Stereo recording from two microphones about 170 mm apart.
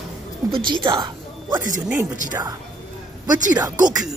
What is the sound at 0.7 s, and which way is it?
A woman's voice, 25° right (ahead or behind).